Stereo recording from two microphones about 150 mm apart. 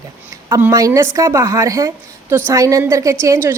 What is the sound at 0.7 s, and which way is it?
A woman's voice, 20° right (ahead or behind).